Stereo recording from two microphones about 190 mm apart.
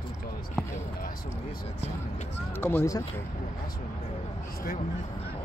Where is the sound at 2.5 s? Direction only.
15° left (ahead or behind).